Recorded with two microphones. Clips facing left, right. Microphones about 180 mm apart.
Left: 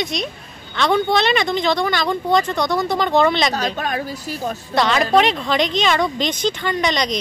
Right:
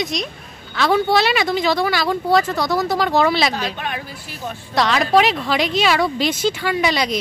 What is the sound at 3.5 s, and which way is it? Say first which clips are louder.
A woman's voice: left 3 dB; 40° left (ahead or behind).